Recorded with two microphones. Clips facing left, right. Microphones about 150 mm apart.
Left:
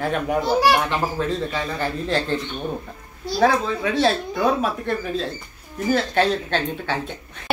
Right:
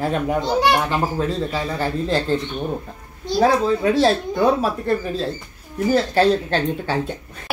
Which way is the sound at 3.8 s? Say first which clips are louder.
Right 4 dB; 35° right (ahead or behind).